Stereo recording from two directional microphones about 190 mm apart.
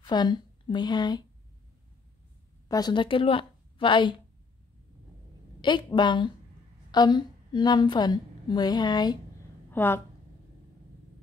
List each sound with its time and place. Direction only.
0.0 s a woman's voice: 25° left (ahead or behind)
2.7 s a woman's voice: 20° left (ahead or behind)
5.6 s a woman's voice: 25° left (ahead or behind)
9.7 s speech: 10° left (ahead or behind)